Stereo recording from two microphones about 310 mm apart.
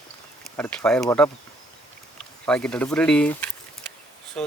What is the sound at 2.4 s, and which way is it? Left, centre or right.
Speech, centre.